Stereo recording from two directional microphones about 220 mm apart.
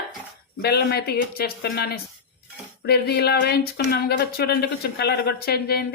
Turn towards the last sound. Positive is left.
turn(degrees=45)  # may be behind; listen again after turning